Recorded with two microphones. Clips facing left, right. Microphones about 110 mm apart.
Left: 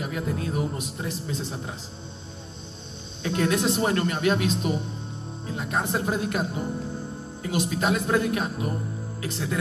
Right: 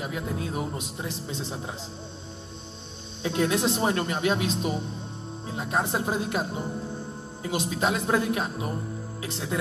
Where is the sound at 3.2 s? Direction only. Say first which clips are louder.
Left 1 dB; 20° right (ahead or behind).